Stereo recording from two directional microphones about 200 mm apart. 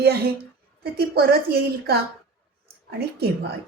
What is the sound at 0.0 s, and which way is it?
Speech, 50° right (ahead or behind).